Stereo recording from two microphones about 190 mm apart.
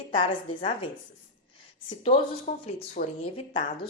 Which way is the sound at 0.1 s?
25° left (ahead or behind).